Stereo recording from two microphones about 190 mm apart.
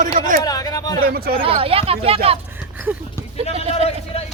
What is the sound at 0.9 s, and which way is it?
Speech, 50° right (ahead or behind).